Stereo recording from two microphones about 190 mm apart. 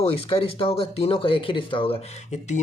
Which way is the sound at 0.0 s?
30° left (ahead or behind).